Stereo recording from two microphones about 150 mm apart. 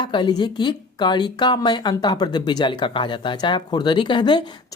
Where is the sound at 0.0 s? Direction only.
30° left (ahead or behind).